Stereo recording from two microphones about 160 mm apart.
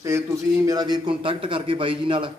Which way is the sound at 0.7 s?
25° right (ahead or behind).